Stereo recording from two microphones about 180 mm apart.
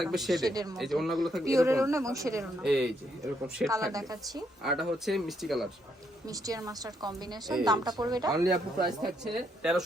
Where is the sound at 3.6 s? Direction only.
20° right (ahead or behind).